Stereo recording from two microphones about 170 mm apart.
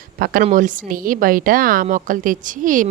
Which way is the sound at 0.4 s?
50° right (ahead or behind).